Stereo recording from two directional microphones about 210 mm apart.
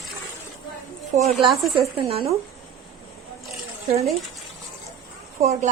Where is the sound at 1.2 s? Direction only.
30° right (ahead or behind).